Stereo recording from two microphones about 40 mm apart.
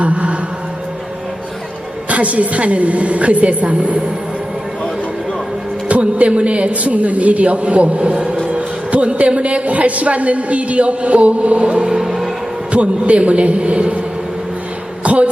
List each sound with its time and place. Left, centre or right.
0.0 s music: right
2.0 s a woman's voice: right
5.9 s a woman's voice: right
11.9 s music: centre
12.7 s a woman's voice: right
15.0 s a sound: right